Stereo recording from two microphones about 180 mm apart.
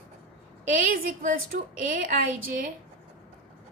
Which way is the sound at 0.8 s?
50° right (ahead or behind).